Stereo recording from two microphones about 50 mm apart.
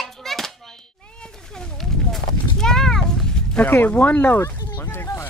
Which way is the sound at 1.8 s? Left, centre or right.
Centre.